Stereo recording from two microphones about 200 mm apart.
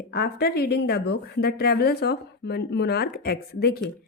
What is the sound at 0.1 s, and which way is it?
A woman's voice, 55° left (ahead or behind).